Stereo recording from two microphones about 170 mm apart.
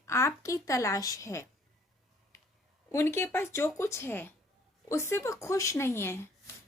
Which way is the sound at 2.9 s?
15° left (ahead or behind).